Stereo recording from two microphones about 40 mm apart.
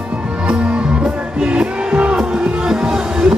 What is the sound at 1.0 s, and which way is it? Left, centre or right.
Music, right.